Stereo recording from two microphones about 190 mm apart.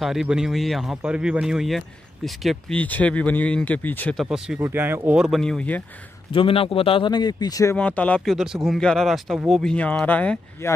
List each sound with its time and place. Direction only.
0.0 s speech: centre (ahead or behind)
4.6 s speech: 15° right (ahead or behind); by 5.9 s 5° left (ahead or behind)
6.3 s speech: 30° left (ahead or behind)
7.7 s speech: 10° left (ahead or behind)